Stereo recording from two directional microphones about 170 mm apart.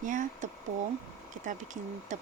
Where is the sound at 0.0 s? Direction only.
50° right (ahead or behind).